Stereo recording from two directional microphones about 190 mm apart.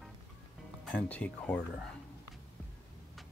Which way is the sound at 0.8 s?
5° left (ahead or behind).